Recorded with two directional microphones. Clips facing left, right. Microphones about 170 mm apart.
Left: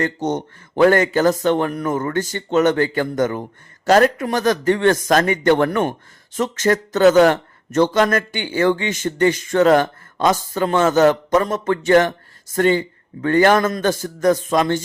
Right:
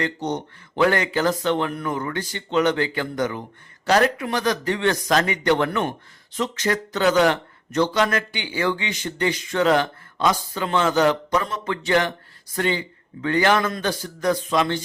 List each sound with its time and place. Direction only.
0.0 s a man's voice: 45° left (ahead or behind)